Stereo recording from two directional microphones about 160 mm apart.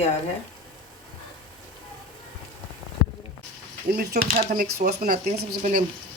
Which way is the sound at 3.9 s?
70° right (ahead or behind).